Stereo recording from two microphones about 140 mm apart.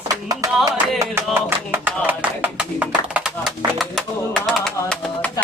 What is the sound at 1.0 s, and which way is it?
Music, 15° right (ahead or behind).